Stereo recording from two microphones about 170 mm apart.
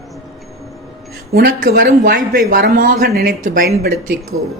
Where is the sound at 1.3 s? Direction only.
60° right (ahead or behind).